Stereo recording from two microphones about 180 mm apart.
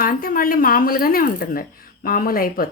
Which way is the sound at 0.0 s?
50° left (ahead or behind).